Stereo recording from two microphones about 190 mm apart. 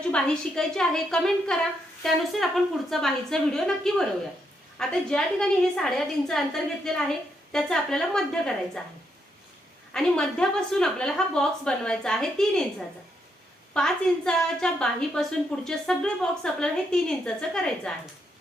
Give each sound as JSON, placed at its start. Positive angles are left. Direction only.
{"t": 0.1, "sound": "a woman's voice", "side_deg": 5}
{"t": 9.9, "sound": "a woman's voice", "side_deg": 5}
{"t": 13.7, "sound": "a woman's voice", "side_deg": 5}